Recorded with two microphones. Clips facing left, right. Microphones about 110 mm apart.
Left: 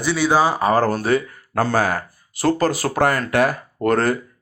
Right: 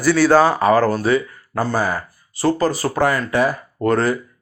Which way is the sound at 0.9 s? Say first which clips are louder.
Right 1 dB; 50° left (ahead or behind).